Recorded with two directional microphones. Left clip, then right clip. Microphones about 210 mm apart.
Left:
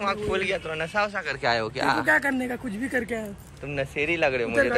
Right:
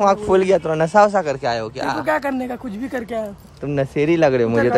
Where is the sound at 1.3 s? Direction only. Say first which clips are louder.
Right 3 dB; 20° right (ahead or behind).